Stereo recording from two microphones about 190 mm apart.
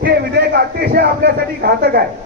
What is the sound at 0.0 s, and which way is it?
A man's voice, 60° right (ahead or behind).